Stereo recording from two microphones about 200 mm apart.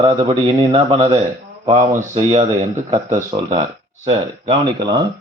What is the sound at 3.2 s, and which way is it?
A man's voice, 20° right (ahead or behind).